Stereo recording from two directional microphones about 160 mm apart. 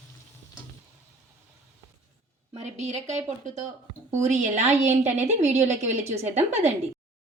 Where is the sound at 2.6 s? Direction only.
45° right (ahead or behind).